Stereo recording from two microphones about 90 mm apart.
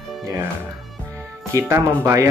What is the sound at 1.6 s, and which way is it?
Speech, 25° right (ahead or behind).